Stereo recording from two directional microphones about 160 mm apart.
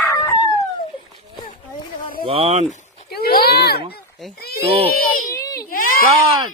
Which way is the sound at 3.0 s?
75° left (ahead or behind).